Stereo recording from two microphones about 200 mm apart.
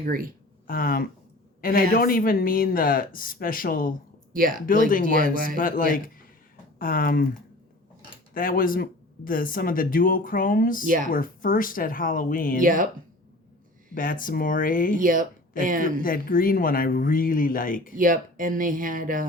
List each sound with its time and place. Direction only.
0.0 s speech: 45° right (ahead or behind)
0.7 s speech: 45° left (ahead or behind)
4.3 s speech: 45° right (ahead or behind)
5.5 s speech: 45° left (ahead or behind)
8.3 s speech: 45° left (ahead or behind)
10.8 s speech: 40° right (ahead or behind)
11.1 s speech: 45° left (ahead or behind)
12.6 s speech: 40° right (ahead or behind)
13.9 s speech: 45° left (ahead or behind)
14.9 s speech: 40° right (ahead or behind)
16.0 s speech: 45° left (ahead or behind)
17.9 s speech: 40° right (ahead or behind)